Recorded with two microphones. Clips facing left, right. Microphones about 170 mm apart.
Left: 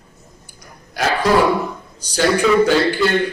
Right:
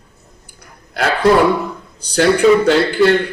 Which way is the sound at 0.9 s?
60° right (ahead or behind).